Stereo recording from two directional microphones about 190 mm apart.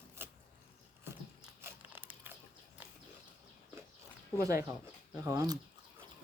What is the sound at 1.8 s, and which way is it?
Biting, 10° right (ahead or behind).